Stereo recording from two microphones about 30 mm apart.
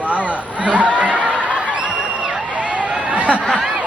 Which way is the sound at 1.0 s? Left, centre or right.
Right.